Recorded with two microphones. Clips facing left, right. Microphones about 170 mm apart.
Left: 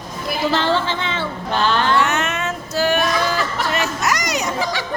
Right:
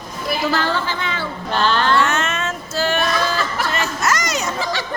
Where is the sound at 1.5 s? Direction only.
10° left (ahead or behind).